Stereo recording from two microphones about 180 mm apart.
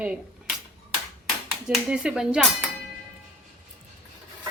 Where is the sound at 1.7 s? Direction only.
5° right (ahead or behind).